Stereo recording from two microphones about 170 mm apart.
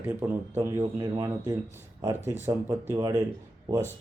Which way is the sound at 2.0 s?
15° right (ahead or behind).